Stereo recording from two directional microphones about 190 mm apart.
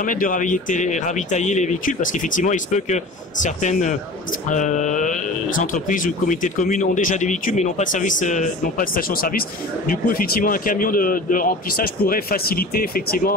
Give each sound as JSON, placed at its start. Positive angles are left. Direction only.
{"t": 0.0, "sound": "speech", "side_deg": 45}